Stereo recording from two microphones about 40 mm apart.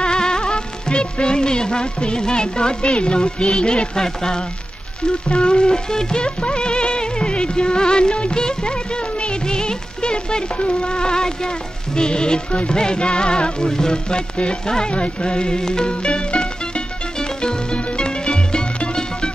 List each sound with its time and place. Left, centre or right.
0.0 s music: centre